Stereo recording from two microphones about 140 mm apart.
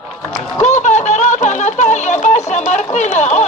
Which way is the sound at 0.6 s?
55° left (ahead or behind).